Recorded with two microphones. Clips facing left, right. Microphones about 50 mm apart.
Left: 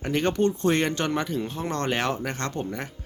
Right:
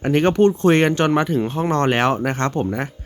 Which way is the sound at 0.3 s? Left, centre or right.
Right.